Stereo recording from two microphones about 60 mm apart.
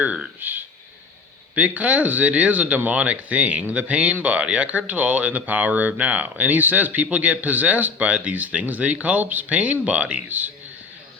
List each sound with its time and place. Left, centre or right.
0.0 s speech: right